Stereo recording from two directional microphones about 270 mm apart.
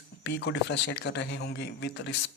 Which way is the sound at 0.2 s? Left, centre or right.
Left.